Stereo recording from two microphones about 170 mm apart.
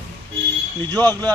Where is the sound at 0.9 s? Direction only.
15° left (ahead or behind).